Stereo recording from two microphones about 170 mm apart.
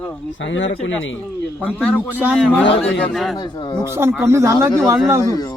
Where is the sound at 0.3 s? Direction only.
90° left.